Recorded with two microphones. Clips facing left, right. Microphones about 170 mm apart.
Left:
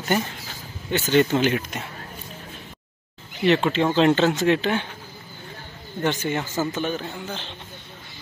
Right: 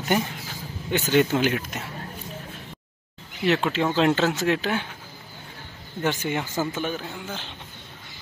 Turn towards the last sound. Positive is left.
turn(degrees=-10)  # may be behind; listen again after turning